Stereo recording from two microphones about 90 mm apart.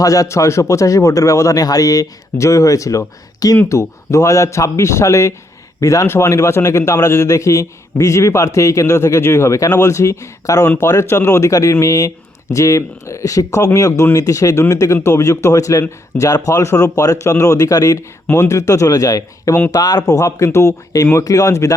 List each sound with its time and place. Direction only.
0.0 s a man's voice: 40° left (ahead or behind)